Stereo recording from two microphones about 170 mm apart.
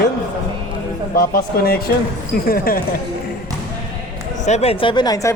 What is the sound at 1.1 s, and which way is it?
Speech, 65° left (ahead or behind).